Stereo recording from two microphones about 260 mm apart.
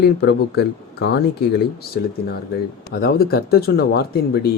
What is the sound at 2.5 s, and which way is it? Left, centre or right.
Speech, left.